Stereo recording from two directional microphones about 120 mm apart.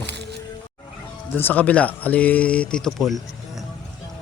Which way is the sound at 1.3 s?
15° left (ahead or behind).